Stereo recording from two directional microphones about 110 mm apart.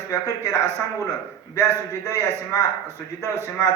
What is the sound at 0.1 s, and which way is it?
Speech, 25° left (ahead or behind).